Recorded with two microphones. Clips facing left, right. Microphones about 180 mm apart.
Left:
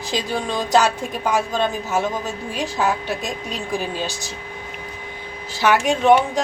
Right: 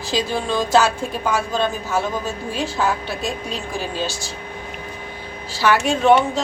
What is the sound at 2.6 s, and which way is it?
Speech, 20° left (ahead or behind).